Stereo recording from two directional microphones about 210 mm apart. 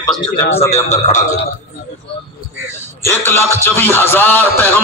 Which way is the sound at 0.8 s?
35° left (ahead or behind).